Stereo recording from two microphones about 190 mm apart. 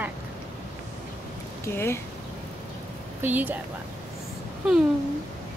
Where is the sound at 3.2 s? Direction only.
10° right (ahead or behind).